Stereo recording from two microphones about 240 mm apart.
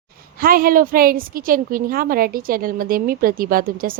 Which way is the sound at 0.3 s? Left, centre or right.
Right.